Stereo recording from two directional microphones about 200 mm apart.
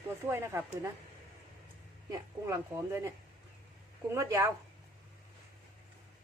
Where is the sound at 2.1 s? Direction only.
15° right (ahead or behind).